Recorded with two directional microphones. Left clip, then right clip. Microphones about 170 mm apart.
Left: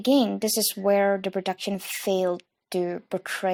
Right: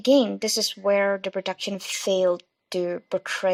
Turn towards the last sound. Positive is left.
turn(degrees=35)  # may be behind; listen again after turning